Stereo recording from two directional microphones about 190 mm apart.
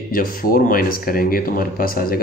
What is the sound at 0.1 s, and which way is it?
Speech, 50° left (ahead or behind).